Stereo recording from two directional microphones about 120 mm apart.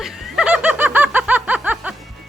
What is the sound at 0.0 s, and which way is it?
Snicker, 10° right (ahead or behind).